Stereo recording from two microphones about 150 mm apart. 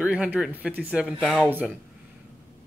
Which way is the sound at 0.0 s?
10° right (ahead or behind).